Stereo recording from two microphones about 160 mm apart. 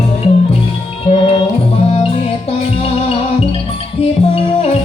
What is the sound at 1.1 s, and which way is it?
Music, 35° left (ahead or behind).